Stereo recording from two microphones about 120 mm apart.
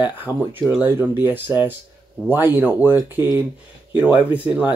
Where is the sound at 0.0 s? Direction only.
15° right (ahead or behind).